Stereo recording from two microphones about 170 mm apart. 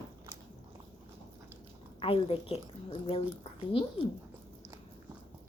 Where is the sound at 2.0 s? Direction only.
35° left (ahead or behind).